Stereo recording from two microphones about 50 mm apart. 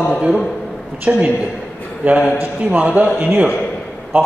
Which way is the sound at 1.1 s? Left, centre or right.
Right.